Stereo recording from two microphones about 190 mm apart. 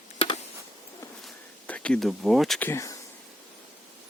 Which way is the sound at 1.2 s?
5° left (ahead or behind).